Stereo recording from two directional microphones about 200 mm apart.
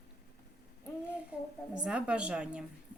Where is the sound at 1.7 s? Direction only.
5° right (ahead or behind).